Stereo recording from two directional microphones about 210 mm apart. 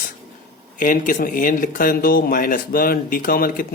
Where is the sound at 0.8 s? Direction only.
40° left (ahead or behind).